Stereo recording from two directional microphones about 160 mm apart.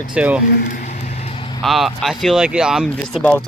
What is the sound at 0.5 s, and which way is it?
Vehicle, 60° left (ahead or behind).